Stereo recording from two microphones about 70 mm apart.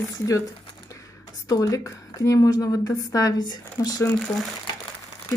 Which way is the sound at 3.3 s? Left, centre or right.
Left.